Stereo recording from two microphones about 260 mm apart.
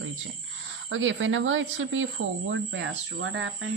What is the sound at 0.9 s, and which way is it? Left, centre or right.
Speech, right.